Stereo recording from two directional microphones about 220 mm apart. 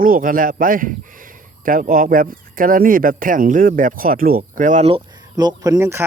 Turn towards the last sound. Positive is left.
turn(degrees=-10)  # may be behind; listen again after turning